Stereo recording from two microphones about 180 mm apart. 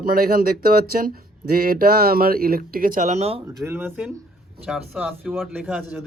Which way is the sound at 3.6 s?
10° right (ahead or behind).